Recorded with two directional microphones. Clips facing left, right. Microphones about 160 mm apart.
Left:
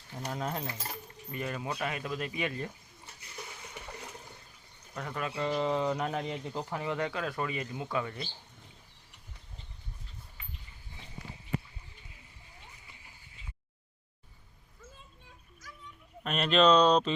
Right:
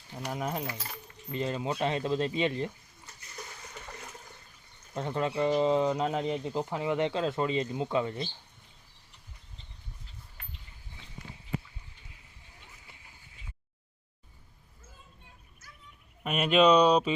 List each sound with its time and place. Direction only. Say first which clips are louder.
0.1 s speech: right 2 dB; 15° right (ahead or behind)
4.9 s speech: right 6 dB; 25° right (ahead or behind)
16.2 s speech: right 2 dB; 10° right (ahead or behind)